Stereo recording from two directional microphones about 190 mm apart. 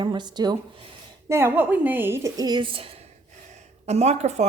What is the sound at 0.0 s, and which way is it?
A woman's voice, 25° right (ahead or behind).